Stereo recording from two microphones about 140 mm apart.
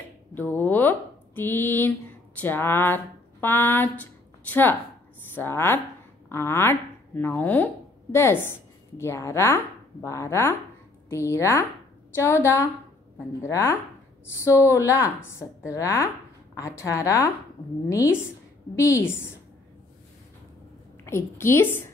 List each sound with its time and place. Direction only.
0.3 s a sound: 15° left (ahead or behind)
5.3 s a woman's voice: 15° left (ahead or behind)
21.0 s a woman's voice: 15° left (ahead or behind)